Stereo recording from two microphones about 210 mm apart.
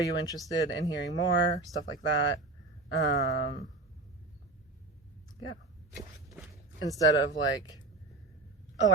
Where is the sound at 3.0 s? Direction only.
55° left (ahead or behind).